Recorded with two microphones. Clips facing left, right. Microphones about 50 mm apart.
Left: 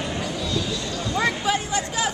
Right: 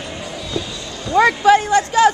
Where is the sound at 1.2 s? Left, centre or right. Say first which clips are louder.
Right 12 dB; right.